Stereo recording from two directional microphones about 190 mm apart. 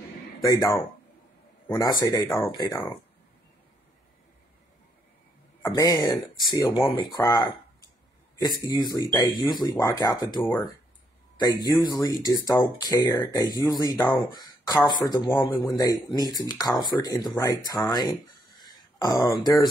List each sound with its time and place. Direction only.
0.5 s speech: 15° left (ahead or behind)
5.7 s speech: 20° left (ahead or behind)